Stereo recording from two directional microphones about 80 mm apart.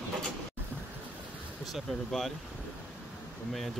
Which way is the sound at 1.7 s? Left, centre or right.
Centre.